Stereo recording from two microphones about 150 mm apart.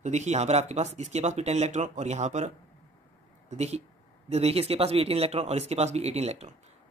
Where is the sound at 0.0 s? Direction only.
50° right (ahead or behind).